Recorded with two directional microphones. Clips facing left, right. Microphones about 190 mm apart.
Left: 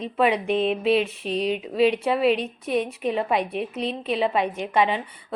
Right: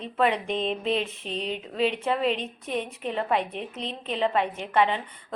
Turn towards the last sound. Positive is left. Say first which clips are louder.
# left 2 dB
turn(degrees=15)  # may be behind; listen again after turning